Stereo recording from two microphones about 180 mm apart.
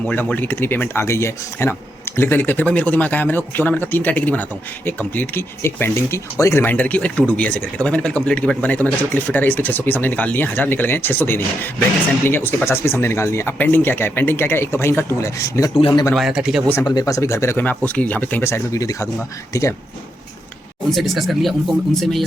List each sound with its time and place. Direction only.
0.0 s speech: 10° left (ahead or behind)
16.1 s speech: 5° right (ahead or behind)
16.8 s speech: 20° left (ahead or behind)
20.9 s speech: centre (ahead or behind)